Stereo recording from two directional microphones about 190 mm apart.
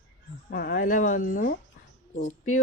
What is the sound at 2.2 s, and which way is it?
Speech, 90° left.